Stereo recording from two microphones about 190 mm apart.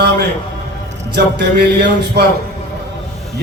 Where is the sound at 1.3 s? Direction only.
60° right (ahead or behind).